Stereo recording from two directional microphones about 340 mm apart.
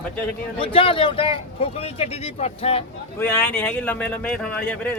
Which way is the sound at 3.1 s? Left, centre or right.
Centre.